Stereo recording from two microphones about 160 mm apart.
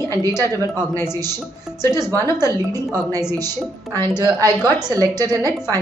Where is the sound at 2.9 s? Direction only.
20° right (ahead or behind).